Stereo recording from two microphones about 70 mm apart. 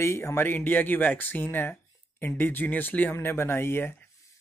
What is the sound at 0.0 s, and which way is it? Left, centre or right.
Speech, left.